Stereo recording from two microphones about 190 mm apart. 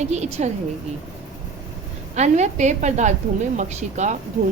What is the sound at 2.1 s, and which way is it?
A woman's voice, 35° right (ahead or behind).